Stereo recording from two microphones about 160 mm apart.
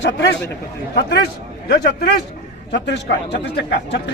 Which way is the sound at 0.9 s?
90° left.